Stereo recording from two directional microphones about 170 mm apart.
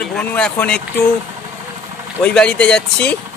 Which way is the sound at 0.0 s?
5° left (ahead or behind).